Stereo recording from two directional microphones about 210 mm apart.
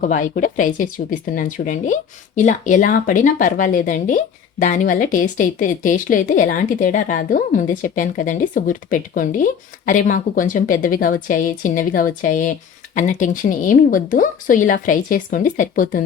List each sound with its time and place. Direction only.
0.0 s a woman's voice: 40° left (ahead or behind)